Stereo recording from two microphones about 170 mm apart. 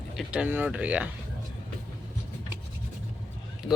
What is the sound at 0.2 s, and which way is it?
Female singing, 5° right (ahead or behind).